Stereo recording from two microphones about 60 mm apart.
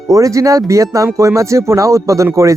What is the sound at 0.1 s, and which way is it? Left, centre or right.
Speech, right.